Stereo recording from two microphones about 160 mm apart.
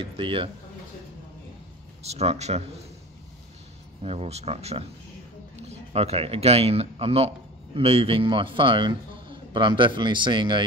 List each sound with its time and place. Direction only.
0.0 s a man's voice: 35° right (ahead or behind)
2.0 s speech: 40° right (ahead or behind)
4.0 s a man's voice: 40° right (ahead or behind)